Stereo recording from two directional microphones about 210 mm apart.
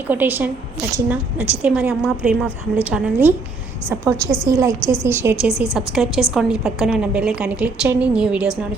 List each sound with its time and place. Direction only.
0.1 s a woman's voice: 10° right (ahead or behind)